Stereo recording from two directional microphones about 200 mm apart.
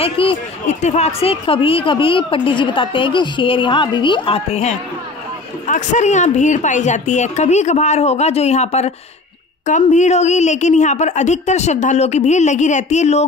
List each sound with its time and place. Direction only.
0.0 s speech: 30° left (ahead or behind)